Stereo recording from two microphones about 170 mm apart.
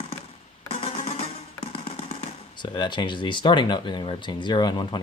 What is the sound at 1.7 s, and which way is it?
Speech, 35° left (ahead or behind).